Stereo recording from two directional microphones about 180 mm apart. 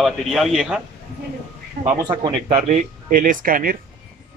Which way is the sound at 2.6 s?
40° right (ahead or behind).